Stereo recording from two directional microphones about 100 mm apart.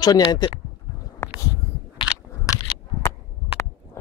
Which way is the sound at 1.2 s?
30° left (ahead or behind).